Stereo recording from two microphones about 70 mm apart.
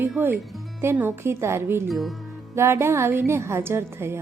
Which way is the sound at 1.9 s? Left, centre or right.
Centre.